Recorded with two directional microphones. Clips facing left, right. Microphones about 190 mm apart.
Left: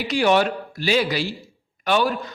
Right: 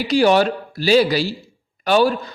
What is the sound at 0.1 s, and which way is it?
A man's voice, 35° right (ahead or behind).